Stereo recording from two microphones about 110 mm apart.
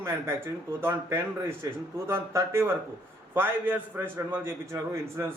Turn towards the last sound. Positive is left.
turn(degrees=-25)  # may be behind; listen again after turning